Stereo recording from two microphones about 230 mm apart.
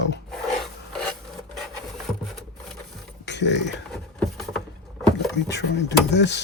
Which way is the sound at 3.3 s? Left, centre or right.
Left.